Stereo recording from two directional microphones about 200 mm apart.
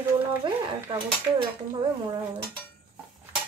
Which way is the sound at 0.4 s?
25° right (ahead or behind).